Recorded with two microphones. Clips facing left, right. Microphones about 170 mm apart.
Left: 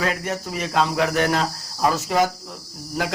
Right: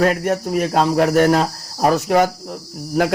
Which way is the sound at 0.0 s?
50° right (ahead or behind).